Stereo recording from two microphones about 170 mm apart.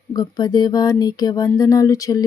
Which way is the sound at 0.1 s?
25° left (ahead or behind).